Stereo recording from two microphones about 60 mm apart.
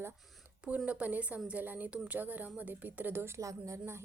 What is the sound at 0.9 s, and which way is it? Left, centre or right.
Speech, right.